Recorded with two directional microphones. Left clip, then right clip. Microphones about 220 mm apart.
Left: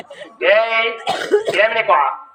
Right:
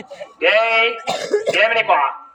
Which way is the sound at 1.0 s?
25° left (ahead or behind).